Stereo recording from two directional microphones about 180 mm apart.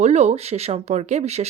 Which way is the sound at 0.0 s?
40° right (ahead or behind).